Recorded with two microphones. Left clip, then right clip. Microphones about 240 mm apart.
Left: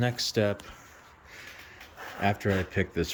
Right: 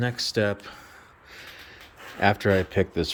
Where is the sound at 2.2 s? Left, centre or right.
Centre.